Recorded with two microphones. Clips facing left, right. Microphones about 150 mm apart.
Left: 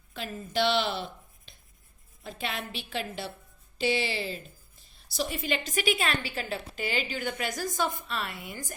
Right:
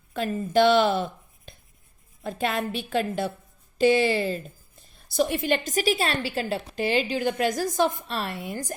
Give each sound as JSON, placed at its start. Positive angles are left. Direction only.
{"t": 0.1, "sound": "a woman's voice", "side_deg": -50}